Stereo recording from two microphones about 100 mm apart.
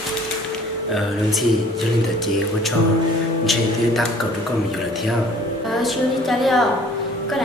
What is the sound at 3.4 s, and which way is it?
Speech, centre (ahead or behind).